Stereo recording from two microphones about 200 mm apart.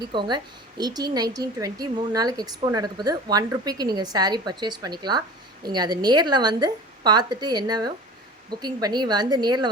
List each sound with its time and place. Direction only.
0.1 s a woman's voice: 25° right (ahead or behind)